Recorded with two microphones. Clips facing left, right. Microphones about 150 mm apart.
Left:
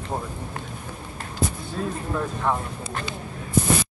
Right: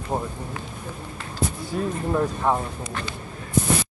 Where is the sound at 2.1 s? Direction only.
15° right (ahead or behind).